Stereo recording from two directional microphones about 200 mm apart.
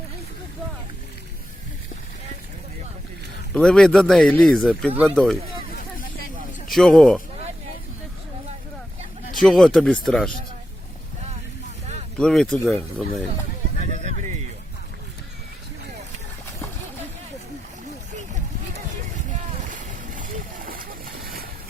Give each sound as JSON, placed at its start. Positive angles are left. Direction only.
{"t": 3.5, "sound": "speech", "side_deg": 5}
{"t": 5.7, "sound": "vehicle", "side_deg": 45}
{"t": 6.7, "sound": "speech", "side_deg": 0}
{"t": 9.3, "sound": "speech", "side_deg": 0}
{"t": 12.1, "sound": "speech", "side_deg": 5}
{"t": 19.6, "sound": "boat", "side_deg": -40}